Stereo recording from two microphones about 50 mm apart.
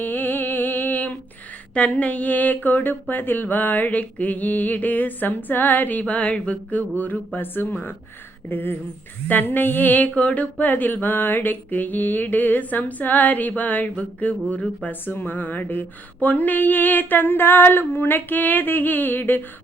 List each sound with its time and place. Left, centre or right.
0.0 s music: left
1.7 s speech: left
14.8 s speech: left